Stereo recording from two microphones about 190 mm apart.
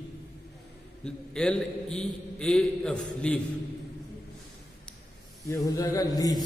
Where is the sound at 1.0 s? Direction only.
5° left (ahead or behind).